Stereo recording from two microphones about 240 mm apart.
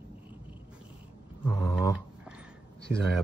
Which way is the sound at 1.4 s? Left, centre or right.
Centre.